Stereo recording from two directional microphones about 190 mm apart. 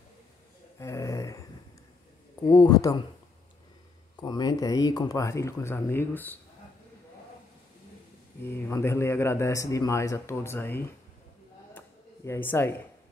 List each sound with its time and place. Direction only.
0.7 s a sound: 15° left (ahead or behind)
2.4 s speech: 20° left (ahead or behind)
4.2 s a man's voice: 20° left (ahead or behind)
8.5 s a man's voice: 15° left (ahead or behind)
12.3 s a man's voice: 10° left (ahead or behind)